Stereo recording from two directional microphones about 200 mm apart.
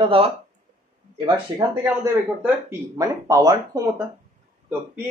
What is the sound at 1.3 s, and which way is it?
Speech, 10° right (ahead or behind).